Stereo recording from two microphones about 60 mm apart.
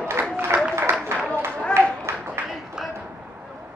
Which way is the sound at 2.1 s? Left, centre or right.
Right.